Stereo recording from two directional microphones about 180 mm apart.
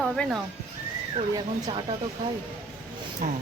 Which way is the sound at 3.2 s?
50° right (ahead or behind).